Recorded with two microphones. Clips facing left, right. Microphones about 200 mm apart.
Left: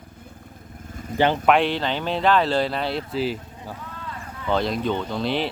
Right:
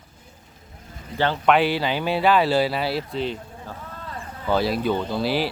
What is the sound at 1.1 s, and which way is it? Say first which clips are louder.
Speech: left 3 dB; 45° left (ahead or behind).